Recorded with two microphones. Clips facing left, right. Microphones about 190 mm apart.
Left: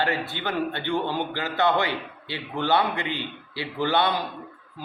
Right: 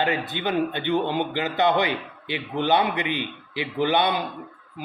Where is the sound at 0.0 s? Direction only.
20° right (ahead or behind).